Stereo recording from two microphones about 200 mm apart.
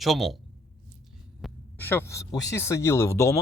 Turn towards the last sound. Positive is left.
turn(degrees=15)  # may be behind; listen again after turning